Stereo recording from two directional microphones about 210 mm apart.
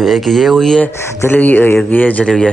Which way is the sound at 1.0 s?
10° left (ahead or behind).